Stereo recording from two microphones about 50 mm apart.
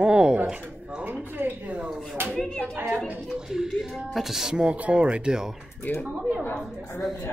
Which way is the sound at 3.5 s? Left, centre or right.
Centre.